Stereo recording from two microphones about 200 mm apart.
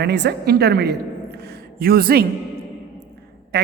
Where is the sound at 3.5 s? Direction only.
60° right (ahead or behind).